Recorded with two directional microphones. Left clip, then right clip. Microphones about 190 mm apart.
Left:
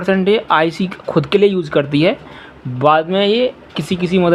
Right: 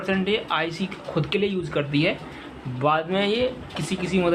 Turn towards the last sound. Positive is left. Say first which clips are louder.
# left 8 dB
turn(degrees=40)  # may be behind; listen again after turning